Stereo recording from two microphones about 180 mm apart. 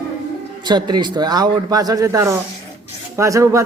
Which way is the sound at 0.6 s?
25° right (ahead or behind).